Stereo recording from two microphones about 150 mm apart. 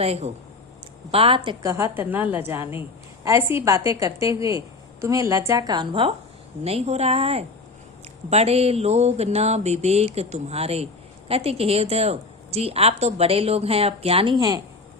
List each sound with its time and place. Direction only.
0.0 s a woman's voice: 40° right (ahead or behind)
1.6 s a woman's voice: 20° right (ahead or behind); by 6.1 s 35° right (ahead or behind)
6.7 s a woman's voice: 45° right (ahead or behind); by 14.6 s 25° right (ahead or behind)